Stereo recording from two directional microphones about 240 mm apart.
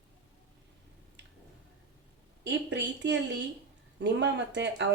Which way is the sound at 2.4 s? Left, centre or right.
Right.